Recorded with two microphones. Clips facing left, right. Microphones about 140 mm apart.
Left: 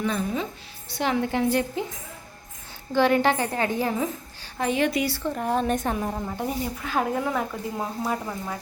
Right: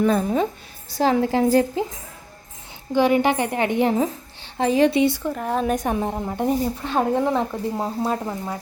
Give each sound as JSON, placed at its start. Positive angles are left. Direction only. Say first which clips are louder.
{"t": 0.0, "sound": "a woman's voice", "louder": "right 7 dB", "side_deg": -45}
{"t": 2.9, "sound": "speech", "louder": "right 2 dB", "side_deg": -15}
{"t": 5.3, "sound": "a woman's voice", "louder": "right 2 dB", "side_deg": 0}
{"t": 5.7, "sound": "speech", "louder": "right 3 dB", "side_deg": -15}